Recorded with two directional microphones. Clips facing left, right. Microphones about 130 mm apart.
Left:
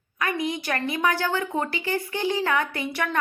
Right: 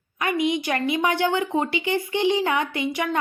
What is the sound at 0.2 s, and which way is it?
A woman's voice, 20° right (ahead or behind).